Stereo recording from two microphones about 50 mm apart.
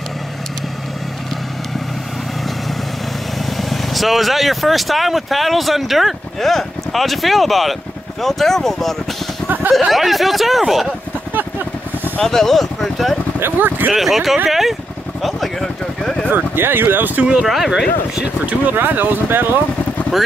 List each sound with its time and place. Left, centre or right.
3.5 s speech: centre
9.7 s speech: centre
12.2 s speech: centre
13.4 s speech: right
13.9 s speech: centre
15.2 s a sound: centre
16.3 s speech: right
17.2 s speech: right
17.5 s speech: centre
18.2 s speech: right
18.8 s speech: right
20.1 s speech: centre